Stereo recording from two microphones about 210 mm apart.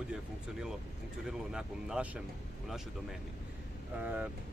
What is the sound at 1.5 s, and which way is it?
Speech, 5° right (ahead or behind).